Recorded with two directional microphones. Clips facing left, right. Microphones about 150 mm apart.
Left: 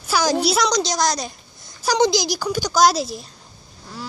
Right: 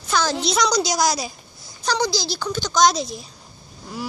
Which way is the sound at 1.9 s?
20° left (ahead or behind).